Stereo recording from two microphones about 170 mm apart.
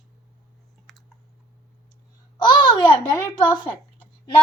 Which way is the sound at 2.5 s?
25° left (ahead or behind).